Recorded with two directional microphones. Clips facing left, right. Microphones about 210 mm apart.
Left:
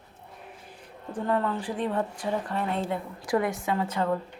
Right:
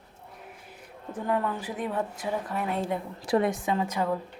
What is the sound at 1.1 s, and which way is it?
A woman's voice, 10° right (ahead or behind).